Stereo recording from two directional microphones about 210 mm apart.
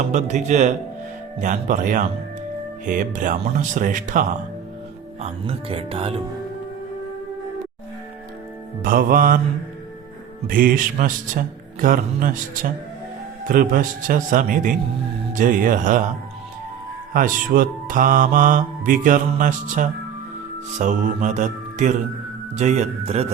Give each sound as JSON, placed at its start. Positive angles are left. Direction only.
{"t": 0.0, "sound": "mantra", "side_deg": -35}
{"t": 5.2, "sound": "speech", "side_deg": -25}
{"t": 8.8, "sound": "mantra", "side_deg": -40}
{"t": 10.4, "sound": "mantra", "side_deg": -40}
{"t": 13.5, "sound": "mantra", "side_deg": -40}
{"t": 17.2, "sound": "mantra", "side_deg": -40}